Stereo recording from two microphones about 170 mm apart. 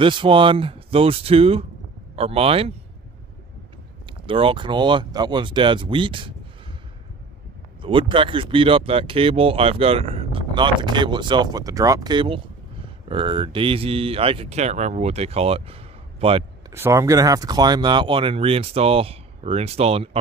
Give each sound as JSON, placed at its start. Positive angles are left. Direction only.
{"t": 0.0, "sound": "speech", "side_deg": -30}
{"t": 4.0, "sound": "speech", "side_deg": -30}
{"t": 7.8, "sound": "speech", "side_deg": -30}
{"t": 16.7, "sound": "speech", "side_deg": -15}